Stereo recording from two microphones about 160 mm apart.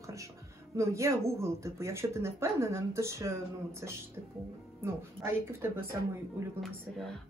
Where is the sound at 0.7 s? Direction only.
20° right (ahead or behind).